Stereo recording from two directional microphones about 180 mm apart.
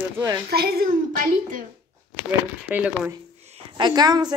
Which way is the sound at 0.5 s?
60° right (ahead or behind).